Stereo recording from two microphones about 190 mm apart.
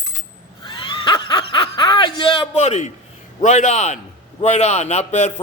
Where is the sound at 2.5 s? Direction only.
35° left (ahead or behind).